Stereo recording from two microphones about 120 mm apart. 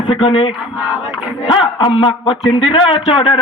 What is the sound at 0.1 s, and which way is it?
A man's voice, 50° left (ahead or behind).